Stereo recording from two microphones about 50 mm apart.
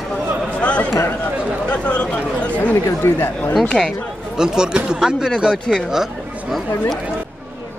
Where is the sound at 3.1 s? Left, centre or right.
Left.